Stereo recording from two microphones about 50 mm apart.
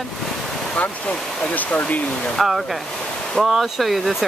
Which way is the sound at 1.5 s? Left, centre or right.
Left.